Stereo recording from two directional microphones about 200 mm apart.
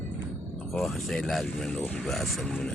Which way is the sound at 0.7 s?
Centre (ahead or behind).